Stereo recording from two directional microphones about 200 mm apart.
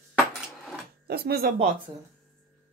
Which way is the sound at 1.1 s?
50° right (ahead or behind).